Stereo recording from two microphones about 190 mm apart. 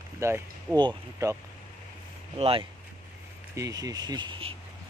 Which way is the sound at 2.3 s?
30° right (ahead or behind).